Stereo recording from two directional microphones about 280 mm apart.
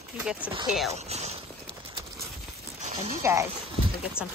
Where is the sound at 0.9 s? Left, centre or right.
Right.